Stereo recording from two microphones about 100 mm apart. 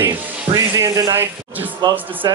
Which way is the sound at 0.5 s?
35° right (ahead or behind).